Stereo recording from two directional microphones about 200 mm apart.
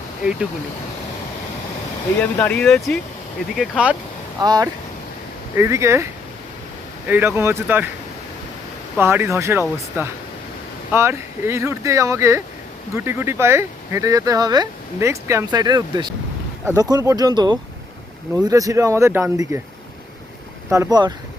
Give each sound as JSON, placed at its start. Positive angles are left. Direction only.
{"t": 2.2, "sound": "speech", "side_deg": 5}
{"t": 4.4, "sound": "speech", "side_deg": -20}
{"t": 7.1, "sound": "speech", "side_deg": -10}
{"t": 9.0, "sound": "speech", "side_deg": -10}
{"t": 20.7, "sound": "speech", "side_deg": -15}